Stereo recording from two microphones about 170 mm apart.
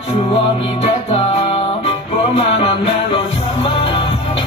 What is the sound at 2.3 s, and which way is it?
Music, 35° left (ahead or behind).